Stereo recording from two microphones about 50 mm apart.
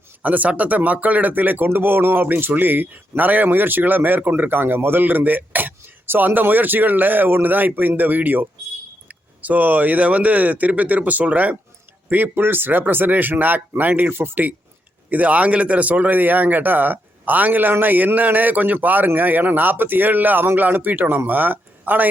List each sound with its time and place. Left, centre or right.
0.2 s speech: right
2.2 s speech: right
12.3 s speech: right
15.1 s speech: right